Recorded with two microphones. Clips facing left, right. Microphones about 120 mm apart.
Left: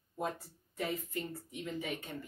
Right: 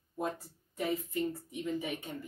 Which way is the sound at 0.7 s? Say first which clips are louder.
Right 3 dB; 20° right (ahead or behind).